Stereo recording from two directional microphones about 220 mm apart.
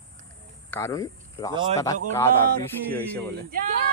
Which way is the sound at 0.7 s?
15° left (ahead or behind).